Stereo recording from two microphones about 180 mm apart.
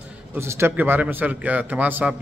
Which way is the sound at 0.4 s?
15° right (ahead or behind).